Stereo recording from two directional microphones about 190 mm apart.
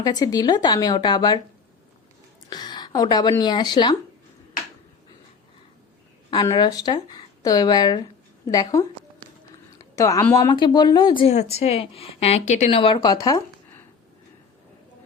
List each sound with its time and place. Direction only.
0.0 s speech: 20° left (ahead or behind)
2.5 s speech: 20° left (ahead or behind)
6.3 s a woman's voice: 20° left (ahead or behind)
9.2 s run: 25° right (ahead or behind)
9.7 s a sound: 15° left (ahead or behind)
10.3 s speech: 20° left (ahead or behind)